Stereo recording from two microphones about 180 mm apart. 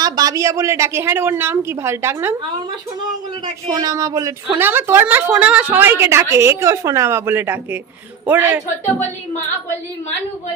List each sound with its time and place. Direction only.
0.0 s a woman's voice: 20° right (ahead or behind)
3.4 s a woman's voice: 20° right (ahead or behind)
9.0 s a woman's voice: 10° left (ahead or behind)